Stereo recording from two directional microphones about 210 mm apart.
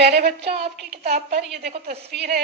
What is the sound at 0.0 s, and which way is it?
A woman's voice, 50° right (ahead or behind).